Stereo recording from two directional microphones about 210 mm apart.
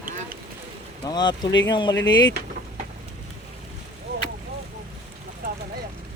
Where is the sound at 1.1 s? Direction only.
20° left (ahead or behind).